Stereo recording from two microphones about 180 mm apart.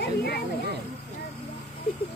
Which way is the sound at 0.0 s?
60° left (ahead or behind).